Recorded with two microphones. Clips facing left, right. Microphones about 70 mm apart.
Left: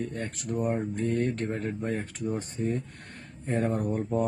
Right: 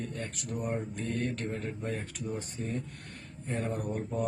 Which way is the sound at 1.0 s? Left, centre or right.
Left.